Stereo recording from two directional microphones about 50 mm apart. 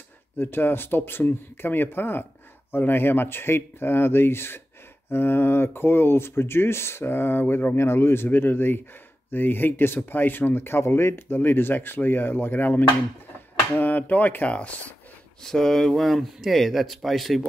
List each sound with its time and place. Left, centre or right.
0.4 s speech: left
15.4 s speech: centre